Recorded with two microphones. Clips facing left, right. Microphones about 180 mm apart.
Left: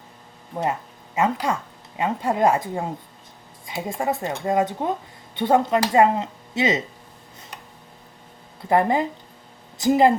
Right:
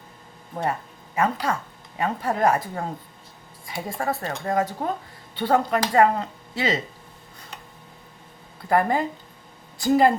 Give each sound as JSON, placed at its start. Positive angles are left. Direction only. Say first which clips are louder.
{"t": 0.5, "sound": "speech", "louder": "left 2 dB", "side_deg": 20}
{"t": 3.7, "sound": "speech", "louder": "left 2 dB", "side_deg": 20}
{"t": 8.7, "sound": "speech", "louder": "left 2 dB", "side_deg": 20}